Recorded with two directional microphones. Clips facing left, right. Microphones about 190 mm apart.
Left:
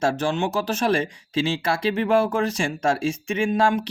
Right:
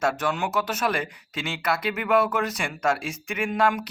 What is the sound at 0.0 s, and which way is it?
Speech, 25° left (ahead or behind).